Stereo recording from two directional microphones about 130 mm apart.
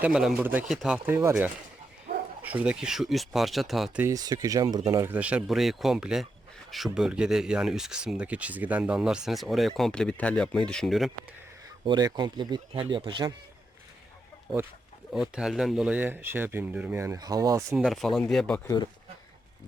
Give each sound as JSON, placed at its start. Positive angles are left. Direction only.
{"t": 0.0, "sound": "speech", "side_deg": -5}
{"t": 2.1, "sound": "bow-wow", "side_deg": -90}
{"t": 2.4, "sound": "speech", "side_deg": -10}
{"t": 4.0, "sound": "speech", "side_deg": -30}
{"t": 5.0, "sound": "speech", "side_deg": -10}
{"t": 11.9, "sound": "speech", "side_deg": -30}
{"t": 15.1, "sound": "speech", "side_deg": -5}
{"t": 17.7, "sound": "speech", "side_deg": 0}